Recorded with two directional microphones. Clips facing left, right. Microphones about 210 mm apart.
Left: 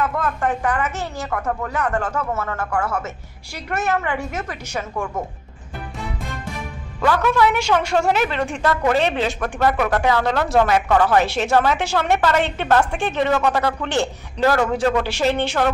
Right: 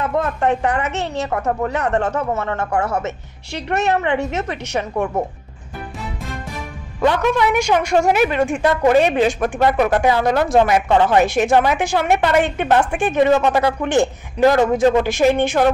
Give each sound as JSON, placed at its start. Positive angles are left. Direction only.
{"t": 0.0, "sound": "a woman's voice", "side_deg": -25}
{"t": 4.9, "sound": "speech", "side_deg": -35}
{"t": 7.0, "sound": "a woman's voice", "side_deg": -20}